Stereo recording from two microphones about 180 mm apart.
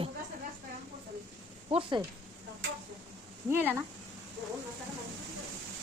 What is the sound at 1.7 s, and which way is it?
Speech, 25° right (ahead or behind).